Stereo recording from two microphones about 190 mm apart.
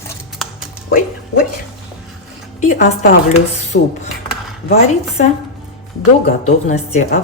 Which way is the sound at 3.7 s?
60° left (ahead or behind).